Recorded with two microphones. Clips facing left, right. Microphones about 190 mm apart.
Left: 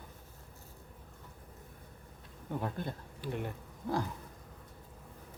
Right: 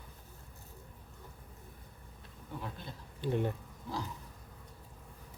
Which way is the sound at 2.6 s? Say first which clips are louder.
Left 8 dB; 55° left (ahead or behind).